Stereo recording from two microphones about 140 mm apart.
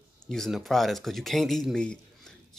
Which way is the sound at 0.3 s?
Centre (ahead or behind).